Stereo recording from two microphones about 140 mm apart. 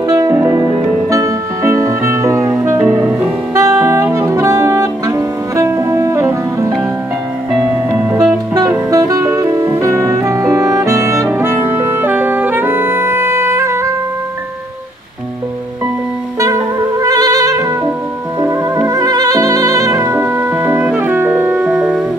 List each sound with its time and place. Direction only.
0.1 s music: 20° right (ahead or behind)
7.9 s music: 15° right (ahead or behind)
8.5 s music: 25° right (ahead or behind)
16.3 s music: 25° right (ahead or behind); by 22.0 s 5° right (ahead or behind)